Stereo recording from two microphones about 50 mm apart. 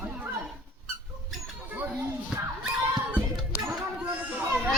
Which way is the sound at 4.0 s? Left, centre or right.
Right.